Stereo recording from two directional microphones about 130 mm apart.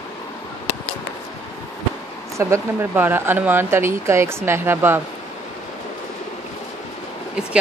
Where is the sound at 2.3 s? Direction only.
20° right (ahead or behind).